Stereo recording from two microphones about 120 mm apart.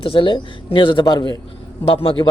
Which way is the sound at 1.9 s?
45° left (ahead or behind).